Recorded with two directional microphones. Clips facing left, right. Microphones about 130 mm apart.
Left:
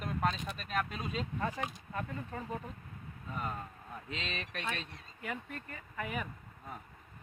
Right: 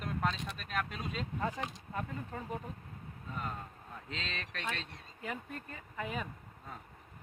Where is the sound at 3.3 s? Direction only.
5° left (ahead or behind).